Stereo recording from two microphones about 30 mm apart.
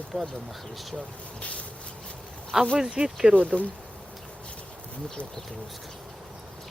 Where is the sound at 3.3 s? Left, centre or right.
Right.